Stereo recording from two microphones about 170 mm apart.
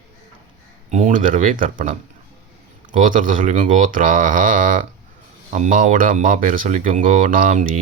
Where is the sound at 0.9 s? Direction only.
50° right (ahead or behind).